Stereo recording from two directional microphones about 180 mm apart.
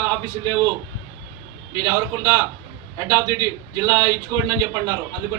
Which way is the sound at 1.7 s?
20° right (ahead or behind).